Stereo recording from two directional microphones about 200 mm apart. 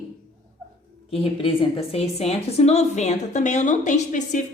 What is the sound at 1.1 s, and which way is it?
A woman's voice, 30° left (ahead or behind).